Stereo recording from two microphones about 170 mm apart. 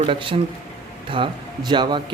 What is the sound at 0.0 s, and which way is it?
Speech, 30° right (ahead or behind).